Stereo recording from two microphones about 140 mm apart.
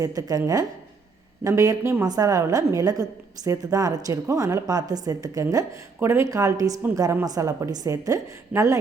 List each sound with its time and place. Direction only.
0.0 s a woman's voice: 25° right (ahead or behind)